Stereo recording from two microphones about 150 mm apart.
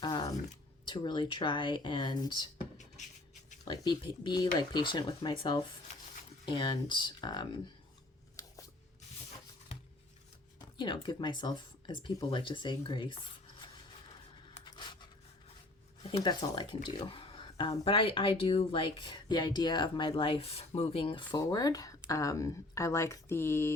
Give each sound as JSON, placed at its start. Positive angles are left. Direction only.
{"t": 0.0, "sound": "a sound", "side_deg": 25}
{"t": 0.9, "sound": "speech", "side_deg": 30}
{"t": 2.7, "sound": "beatboxing", "side_deg": 50}
{"t": 3.7, "sound": "speech", "side_deg": 30}
{"t": 10.8, "sound": "speech", "side_deg": 30}
{"t": 14.6, "sound": "coin", "side_deg": 30}
{"t": 16.2, "sound": "speech", "side_deg": 30}